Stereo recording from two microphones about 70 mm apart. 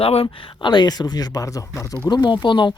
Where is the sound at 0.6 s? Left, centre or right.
Left.